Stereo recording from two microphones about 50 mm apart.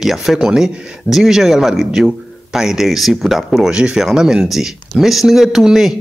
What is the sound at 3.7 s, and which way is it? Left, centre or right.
Speech, centre.